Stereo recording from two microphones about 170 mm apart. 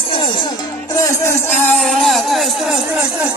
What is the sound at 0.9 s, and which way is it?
Music, 15° left (ahead or behind).